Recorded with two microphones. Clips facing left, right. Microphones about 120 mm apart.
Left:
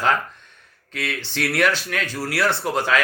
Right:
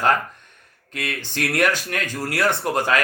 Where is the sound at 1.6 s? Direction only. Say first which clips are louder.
Even; 50° right (ahead or behind).